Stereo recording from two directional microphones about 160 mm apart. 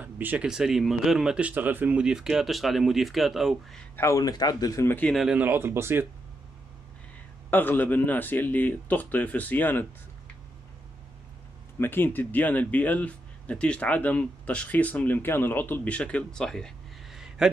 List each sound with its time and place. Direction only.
0.0 s speech: 10° right (ahead or behind)
3.9 s speech: 20° left (ahead or behind)
5.1 s speech: 5° right (ahead or behind)
7.5 s speech: 10° left (ahead or behind)
11.8 s speech: 15° left (ahead or behind)